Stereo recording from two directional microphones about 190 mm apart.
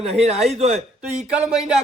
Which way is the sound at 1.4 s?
Centre (ahead or behind).